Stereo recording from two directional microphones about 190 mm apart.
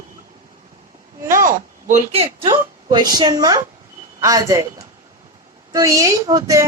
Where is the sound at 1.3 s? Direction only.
45° right (ahead or behind).